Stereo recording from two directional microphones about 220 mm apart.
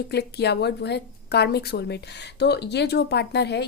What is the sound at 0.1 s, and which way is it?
Speech, 50° left (ahead or behind).